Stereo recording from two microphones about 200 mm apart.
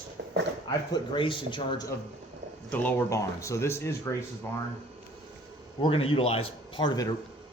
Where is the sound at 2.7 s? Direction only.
10° left (ahead or behind).